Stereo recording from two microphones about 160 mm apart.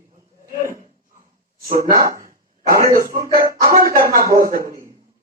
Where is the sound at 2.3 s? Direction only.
60° right (ahead or behind).